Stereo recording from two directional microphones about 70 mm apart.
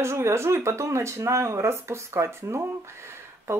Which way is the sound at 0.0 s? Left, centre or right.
Right.